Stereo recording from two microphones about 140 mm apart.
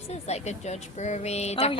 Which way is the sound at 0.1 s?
50° left (ahead or behind).